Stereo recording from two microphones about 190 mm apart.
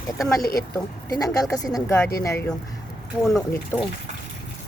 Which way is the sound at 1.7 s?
20° left (ahead or behind).